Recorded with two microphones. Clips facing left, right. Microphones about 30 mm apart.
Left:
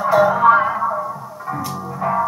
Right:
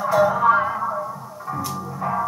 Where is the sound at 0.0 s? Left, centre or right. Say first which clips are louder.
Left 4 dB; centre.